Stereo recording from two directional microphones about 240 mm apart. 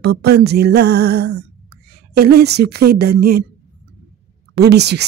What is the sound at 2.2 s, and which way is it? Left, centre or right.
Speech, right.